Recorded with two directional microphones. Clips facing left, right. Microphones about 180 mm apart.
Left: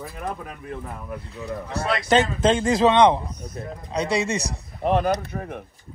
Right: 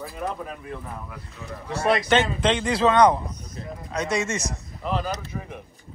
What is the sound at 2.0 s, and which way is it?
Speech, 40° left (ahead or behind).